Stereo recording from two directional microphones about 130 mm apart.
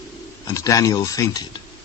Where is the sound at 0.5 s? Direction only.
25° left (ahead or behind).